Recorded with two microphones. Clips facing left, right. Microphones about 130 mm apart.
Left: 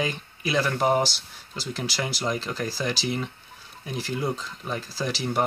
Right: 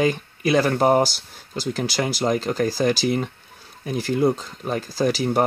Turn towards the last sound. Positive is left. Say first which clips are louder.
# right 8 dB
turn(degrees=-45)  # may be behind; listen again after turning